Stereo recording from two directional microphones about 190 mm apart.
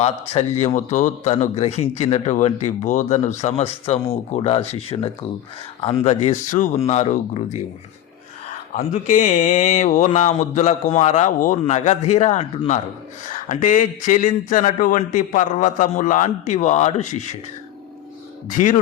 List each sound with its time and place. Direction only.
0.0 s a man's voice: 35° left (ahead or behind)
8.7 s a man's voice: 40° left (ahead or behind)
18.4 s a man's voice: 40° left (ahead or behind)